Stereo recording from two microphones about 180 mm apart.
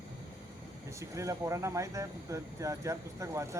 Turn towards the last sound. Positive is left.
turn(degrees=-15)  # may be behind; listen again after turning